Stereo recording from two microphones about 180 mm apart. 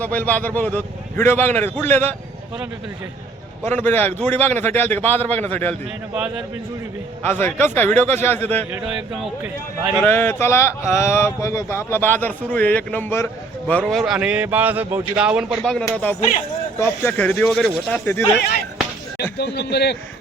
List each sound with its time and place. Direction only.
0.0 s speech: 10° left (ahead or behind)
3.7 s speech: 10° left (ahead or behind)
6.1 s speech: 10° right (ahead or behind)
7.2 s speech: 10° left (ahead or behind)
8.7 s speech: 5° right (ahead or behind)
10.1 s speech: 10° left (ahead or behind)
19.4 s a man's voice: 70° left (ahead or behind)